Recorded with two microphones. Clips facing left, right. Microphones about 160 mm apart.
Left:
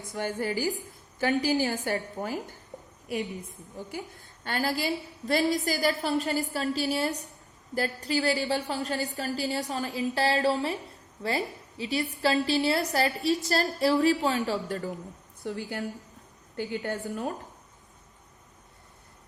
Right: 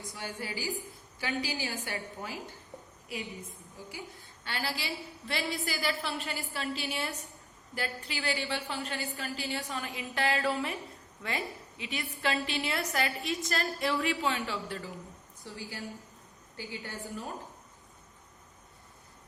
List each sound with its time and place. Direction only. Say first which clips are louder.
0.1 s a woman's voice: left 11 dB; 50° left (ahead or behind)
4.4 s a woman's voice: left 8 dB; 45° left (ahead or behind)
15.4 s a woman's voice: left 8 dB; 60° left (ahead or behind)